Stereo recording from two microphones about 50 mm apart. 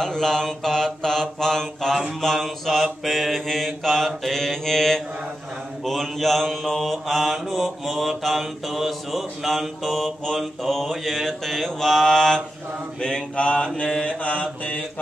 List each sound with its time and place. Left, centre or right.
0.0 s mantra: centre; by 14.8 s left